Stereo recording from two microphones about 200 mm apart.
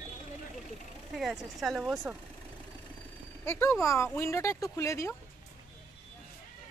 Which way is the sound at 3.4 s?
10° left (ahead or behind).